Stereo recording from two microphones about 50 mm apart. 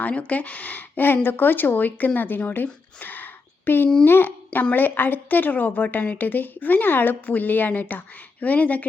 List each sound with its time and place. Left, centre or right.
0.0 s a woman's voice: left
3.0 s a sound: left
4.0 s a child's voice: left